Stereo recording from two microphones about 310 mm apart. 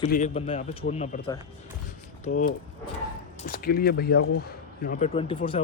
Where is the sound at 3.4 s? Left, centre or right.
Left.